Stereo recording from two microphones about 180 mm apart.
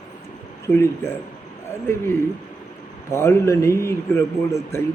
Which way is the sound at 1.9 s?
15° left (ahead or behind).